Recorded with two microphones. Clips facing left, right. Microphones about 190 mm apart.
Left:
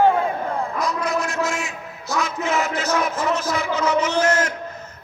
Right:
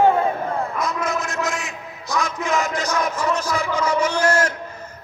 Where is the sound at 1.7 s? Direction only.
15° right (ahead or behind).